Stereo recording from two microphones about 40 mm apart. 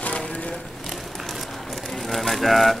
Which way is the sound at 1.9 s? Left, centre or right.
Centre.